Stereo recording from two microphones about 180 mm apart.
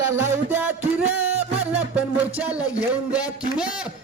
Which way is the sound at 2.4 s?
5° right (ahead or behind).